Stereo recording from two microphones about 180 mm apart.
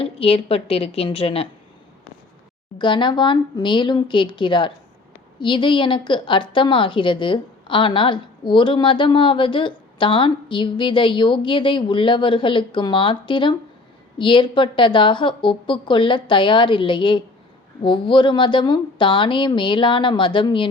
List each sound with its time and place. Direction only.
0.0 s a woman's voice: 30° left (ahead or behind)
2.7 s a woman's voice: 25° left (ahead or behind)